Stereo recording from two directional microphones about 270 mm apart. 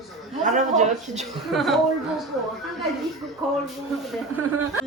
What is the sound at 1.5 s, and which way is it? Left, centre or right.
Child singing, centre.